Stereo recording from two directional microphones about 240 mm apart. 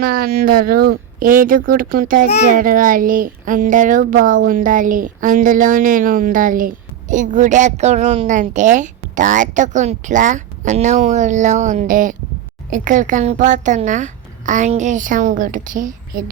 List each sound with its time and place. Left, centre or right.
0.0 s child singing: right